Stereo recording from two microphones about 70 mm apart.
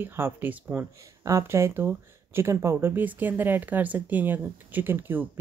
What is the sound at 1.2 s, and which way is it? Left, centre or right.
Speech, right.